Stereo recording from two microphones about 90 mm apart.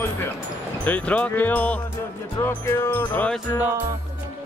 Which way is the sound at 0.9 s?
15° left (ahead or behind).